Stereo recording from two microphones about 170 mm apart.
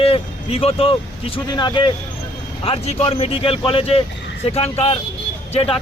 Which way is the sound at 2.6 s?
35° left (ahead or behind).